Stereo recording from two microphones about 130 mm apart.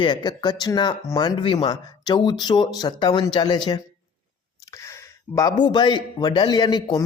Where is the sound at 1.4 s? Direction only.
45° left (ahead or behind).